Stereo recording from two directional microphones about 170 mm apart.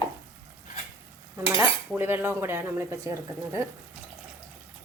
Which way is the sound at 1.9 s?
10° right (ahead or behind).